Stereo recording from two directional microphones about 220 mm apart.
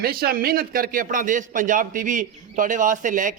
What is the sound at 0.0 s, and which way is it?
A man's voice, 45° right (ahead or behind).